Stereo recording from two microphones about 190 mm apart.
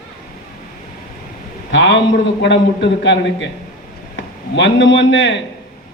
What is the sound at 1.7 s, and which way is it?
A man's voice, 70° left (ahead or behind).